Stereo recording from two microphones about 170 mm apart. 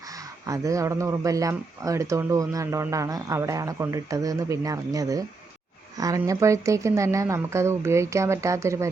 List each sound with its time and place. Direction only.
0.1 s speech: 20° right (ahead or behind)